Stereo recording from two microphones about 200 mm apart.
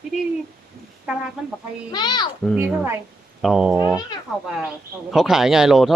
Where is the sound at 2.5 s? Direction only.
10° right (ahead or behind).